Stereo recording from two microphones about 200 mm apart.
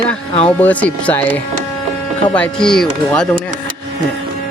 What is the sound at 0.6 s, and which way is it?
Speech, 10° left (ahead or behind).